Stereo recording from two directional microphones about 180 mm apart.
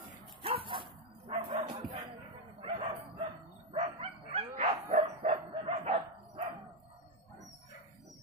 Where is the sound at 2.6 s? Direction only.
30° right (ahead or behind).